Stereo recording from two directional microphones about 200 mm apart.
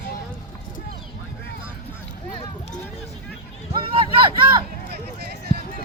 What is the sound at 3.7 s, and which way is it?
Vehicle, 25° right (ahead or behind).